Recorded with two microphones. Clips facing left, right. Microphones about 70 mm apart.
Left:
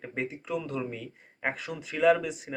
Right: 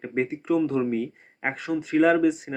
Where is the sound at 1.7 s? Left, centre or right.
Right.